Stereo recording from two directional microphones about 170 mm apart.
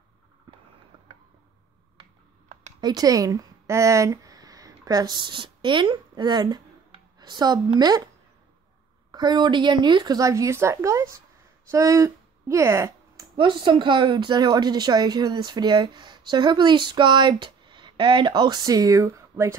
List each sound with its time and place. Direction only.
2.8 s speech: 20° right (ahead or behind)
9.1 s speech: 25° right (ahead or behind)
13.2 s speech: 30° right (ahead or behind)